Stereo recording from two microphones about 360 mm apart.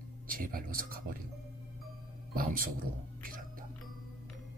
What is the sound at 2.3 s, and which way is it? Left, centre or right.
Speech, right.